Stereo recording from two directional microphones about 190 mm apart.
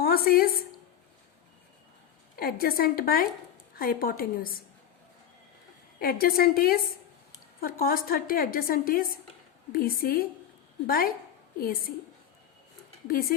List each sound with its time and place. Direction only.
0.0 s a sound: 50° left (ahead or behind)
2.3 s a woman's voice: 50° left (ahead or behind)
6.0 s a woman's voice: 50° left (ahead or behind)
13.1 s a woman's voice: 50° left (ahead or behind)